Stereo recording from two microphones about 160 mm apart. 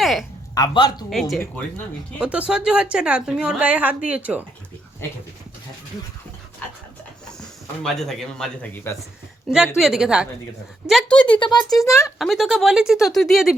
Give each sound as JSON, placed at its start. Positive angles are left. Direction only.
{"t": 0.0, "sound": "a sound", "side_deg": 0}
{"t": 0.5, "sound": "a man's voice", "side_deg": 30}
{"t": 1.1, "sound": "a woman's voice", "side_deg": 0}
{"t": 7.4, "sound": "speech", "side_deg": 0}
{"t": 11.3, "sound": "a man's voice", "side_deg": 30}
{"t": 12.0, "sound": "speech", "side_deg": 0}